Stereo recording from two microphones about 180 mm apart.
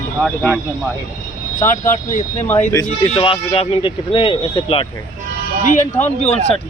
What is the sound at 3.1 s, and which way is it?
Speech, 30° left (ahead or behind).